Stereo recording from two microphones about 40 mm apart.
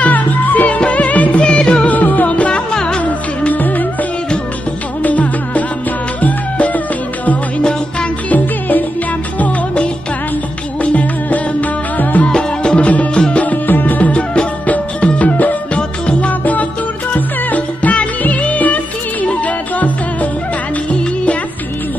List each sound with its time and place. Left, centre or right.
0.0 s music: left
0.7 s music: left
1.4 s music: left
1.9 s music: left
2.7 s music: left
3.4 s music: left
5.0 s music: left
8.3 s music: left
10.8 s music: left
12.3 s music: left
12.9 s music: left
13.7 s music: left
15.0 s music: left
15.7 s music: left